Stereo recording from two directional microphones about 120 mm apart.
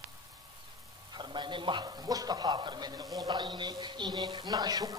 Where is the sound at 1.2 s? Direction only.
40° right (ahead or behind).